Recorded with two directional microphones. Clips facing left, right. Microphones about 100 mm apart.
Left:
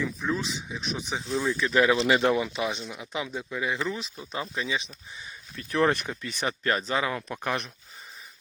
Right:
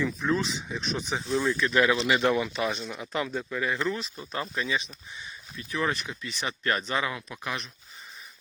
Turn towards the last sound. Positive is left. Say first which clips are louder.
# left 5 dB
turn(degrees=45)  # may be behind; listen again after turning